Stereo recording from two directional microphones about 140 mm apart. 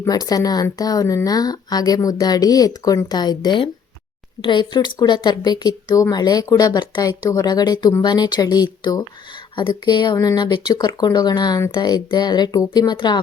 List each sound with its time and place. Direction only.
0.0 s speech: 25° left (ahead or behind)